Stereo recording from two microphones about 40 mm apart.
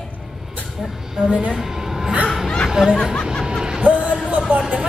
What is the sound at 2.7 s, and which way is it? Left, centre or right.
Chatter, centre.